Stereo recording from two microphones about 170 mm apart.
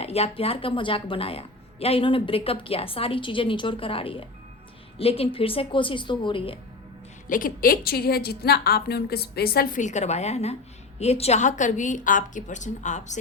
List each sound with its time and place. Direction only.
0.0 s a woman's voice: 35° left (ahead or behind)
7.3 s a woman's voice: 55° left (ahead or behind)